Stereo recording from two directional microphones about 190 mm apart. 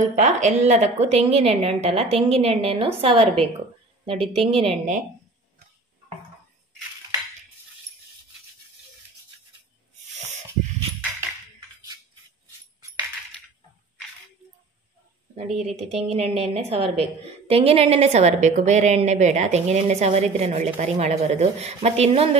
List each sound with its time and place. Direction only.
0.0 s a woman's voice: 40° right (ahead or behind)
10.1 s a sound: 40° right (ahead or behind)
15.3 s a woman's voice: 35° right (ahead or behind)